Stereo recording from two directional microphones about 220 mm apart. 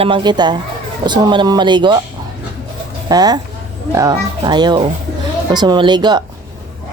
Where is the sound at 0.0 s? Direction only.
20° right (ahead or behind).